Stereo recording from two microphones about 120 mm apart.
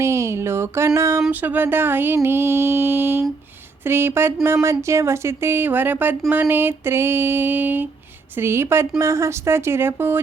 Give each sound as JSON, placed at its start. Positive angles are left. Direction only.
{"t": 0.0, "sound": "a sound", "side_deg": -25}
{"t": 1.3, "sound": "mantra", "side_deg": -15}
{"t": 3.8, "sound": "speech", "side_deg": -20}